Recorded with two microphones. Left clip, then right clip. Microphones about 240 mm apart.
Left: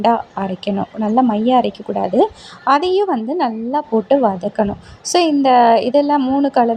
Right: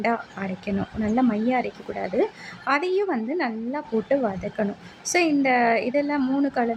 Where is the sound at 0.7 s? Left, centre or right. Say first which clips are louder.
Left 6 dB; left.